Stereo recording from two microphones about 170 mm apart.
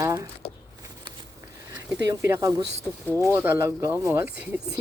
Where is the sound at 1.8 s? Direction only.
15° right (ahead or behind).